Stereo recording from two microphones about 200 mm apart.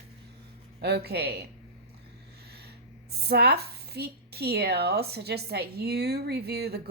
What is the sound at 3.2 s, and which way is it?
A woman's voice, 55° right (ahead or behind).